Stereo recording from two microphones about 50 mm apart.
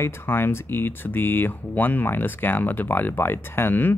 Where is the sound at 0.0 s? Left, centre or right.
Left.